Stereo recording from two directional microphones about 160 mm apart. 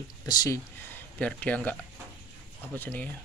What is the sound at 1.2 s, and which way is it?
Speech, 10° left (ahead or behind).